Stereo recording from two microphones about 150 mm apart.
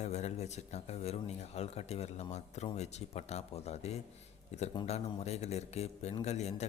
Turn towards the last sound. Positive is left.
turn(degrees=45)  # may be behind; listen again after turning